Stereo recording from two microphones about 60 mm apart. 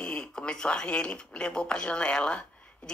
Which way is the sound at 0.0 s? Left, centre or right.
Centre.